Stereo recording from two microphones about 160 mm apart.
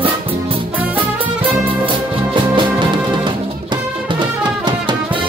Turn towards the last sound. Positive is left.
turn(degrees=-30)  # may be behind; listen again after turning